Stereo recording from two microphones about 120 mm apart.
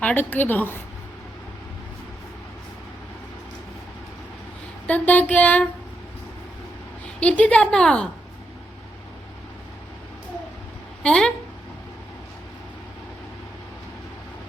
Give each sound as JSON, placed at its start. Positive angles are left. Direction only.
{"t": 0.0, "sound": "a woman's voice", "side_deg": 15}
{"t": 4.9, "sound": "a woman's voice", "side_deg": 15}
{"t": 7.2, "sound": "a woman's voice", "side_deg": 10}
{"t": 11.0, "sound": "speech", "side_deg": 10}